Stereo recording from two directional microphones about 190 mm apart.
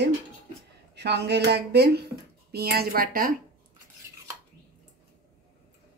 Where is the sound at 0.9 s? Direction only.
60° right (ahead or behind).